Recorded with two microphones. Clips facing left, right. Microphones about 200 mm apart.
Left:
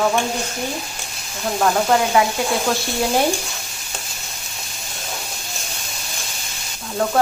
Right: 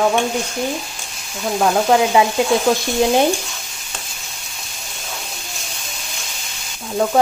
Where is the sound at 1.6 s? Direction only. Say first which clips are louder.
Right 3 dB; 15° right (ahead or behind).